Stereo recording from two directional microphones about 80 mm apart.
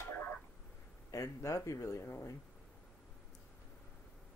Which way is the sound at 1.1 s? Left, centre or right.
Left.